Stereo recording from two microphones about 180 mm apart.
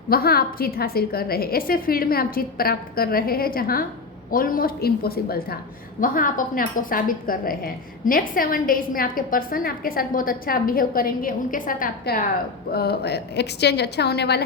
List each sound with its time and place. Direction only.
0.1 s a woman's voice: 60° left (ahead or behind)
12.7 s a woman's voice: 60° left (ahead or behind)